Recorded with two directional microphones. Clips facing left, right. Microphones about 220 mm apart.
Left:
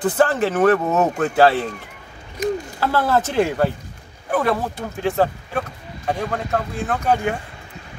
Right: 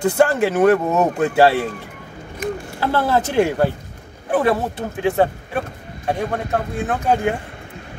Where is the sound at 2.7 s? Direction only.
20° right (ahead or behind).